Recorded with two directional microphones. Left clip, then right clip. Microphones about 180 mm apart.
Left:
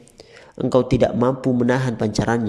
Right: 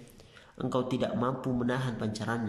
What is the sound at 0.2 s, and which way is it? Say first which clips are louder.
A man's voice: left 12 dB; 30° left (ahead or behind).